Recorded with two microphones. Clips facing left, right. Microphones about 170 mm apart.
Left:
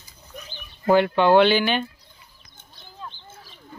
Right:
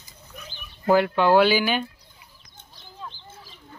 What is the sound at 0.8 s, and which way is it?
Speech, centre (ahead or behind).